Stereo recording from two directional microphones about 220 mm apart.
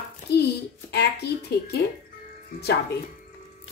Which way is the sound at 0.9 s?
45° left (ahead or behind).